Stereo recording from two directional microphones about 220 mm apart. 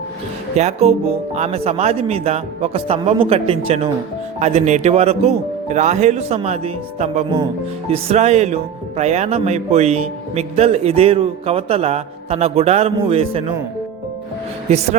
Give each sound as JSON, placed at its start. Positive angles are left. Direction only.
{"t": 0.5, "sound": "speech", "side_deg": -30}